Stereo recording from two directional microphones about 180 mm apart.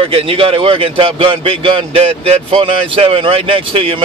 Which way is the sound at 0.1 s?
30° right (ahead or behind).